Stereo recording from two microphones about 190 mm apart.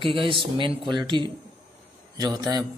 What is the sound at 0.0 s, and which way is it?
A man's voice, 25° right (ahead or behind).